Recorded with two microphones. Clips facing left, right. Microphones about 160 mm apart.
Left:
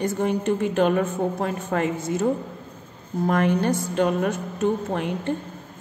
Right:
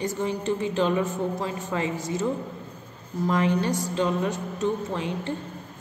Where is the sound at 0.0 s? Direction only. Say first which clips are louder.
Left 4 dB; 55° left (ahead or behind).